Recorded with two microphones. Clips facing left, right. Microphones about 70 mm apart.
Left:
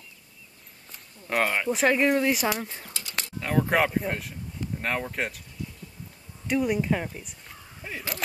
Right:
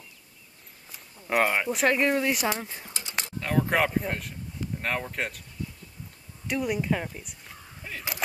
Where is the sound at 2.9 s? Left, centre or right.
Right.